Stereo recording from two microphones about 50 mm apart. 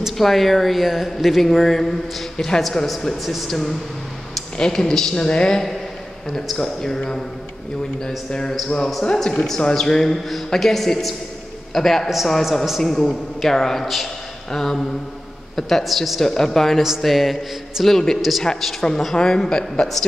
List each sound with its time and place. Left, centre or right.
0.2 s a woman's voice: centre
8.3 s a woman's voice: centre